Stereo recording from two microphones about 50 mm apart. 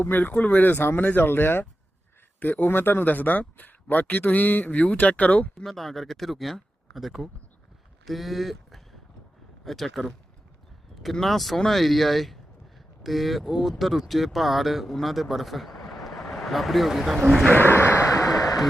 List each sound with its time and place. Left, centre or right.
0.0 s speech: left
0.8 s speech: left
5.6 s speech: centre
17.5 s speech: left
17.9 s a sound: left